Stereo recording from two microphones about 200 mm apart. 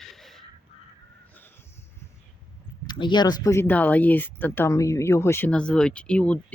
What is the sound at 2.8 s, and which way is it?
Speech, 20° left (ahead or behind).